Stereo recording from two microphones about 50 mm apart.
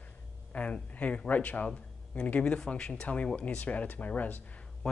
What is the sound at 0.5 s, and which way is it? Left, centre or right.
Speech, left.